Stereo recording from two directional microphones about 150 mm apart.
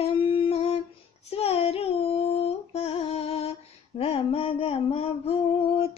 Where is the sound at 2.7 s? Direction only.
40° left (ahead or behind).